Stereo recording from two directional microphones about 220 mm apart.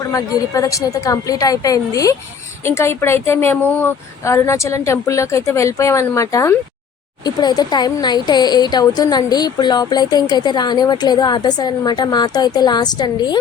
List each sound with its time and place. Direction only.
0.1 s a woman's voice: 15° left (ahead or behind)